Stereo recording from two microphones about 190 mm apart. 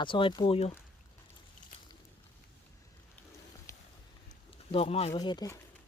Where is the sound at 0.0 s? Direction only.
25° left (ahead or behind).